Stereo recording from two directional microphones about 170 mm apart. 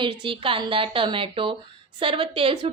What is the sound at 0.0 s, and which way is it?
A woman's voice, 30° right (ahead or behind).